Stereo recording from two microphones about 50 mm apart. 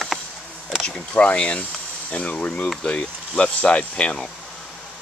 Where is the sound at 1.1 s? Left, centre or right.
Left.